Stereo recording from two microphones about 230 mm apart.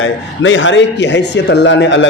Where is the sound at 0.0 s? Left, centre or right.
Left.